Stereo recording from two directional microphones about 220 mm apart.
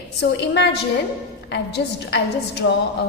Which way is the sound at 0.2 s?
50° left (ahead or behind).